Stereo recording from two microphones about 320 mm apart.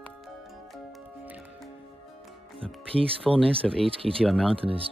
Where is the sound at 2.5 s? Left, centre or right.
Centre.